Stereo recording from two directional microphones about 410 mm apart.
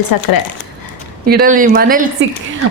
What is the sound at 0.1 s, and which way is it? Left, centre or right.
Speech, left.